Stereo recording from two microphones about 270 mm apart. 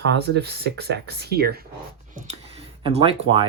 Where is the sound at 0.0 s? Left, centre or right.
Right.